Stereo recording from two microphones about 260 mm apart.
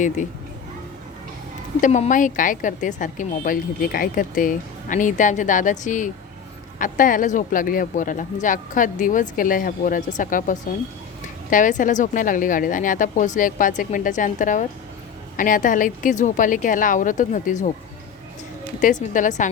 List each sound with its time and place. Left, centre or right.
1.8 s a woman's voice: left
18.8 s a woman's voice: left